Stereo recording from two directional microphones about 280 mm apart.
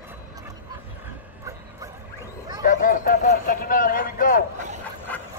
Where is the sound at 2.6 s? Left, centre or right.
Left.